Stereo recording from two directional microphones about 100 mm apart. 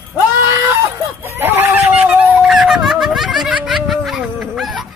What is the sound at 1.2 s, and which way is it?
Speech, 20° right (ahead or behind).